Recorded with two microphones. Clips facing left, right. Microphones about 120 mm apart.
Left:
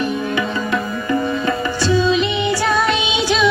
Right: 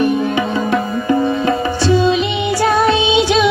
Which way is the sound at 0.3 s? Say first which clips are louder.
Right 4 dB; 25° right (ahead or behind).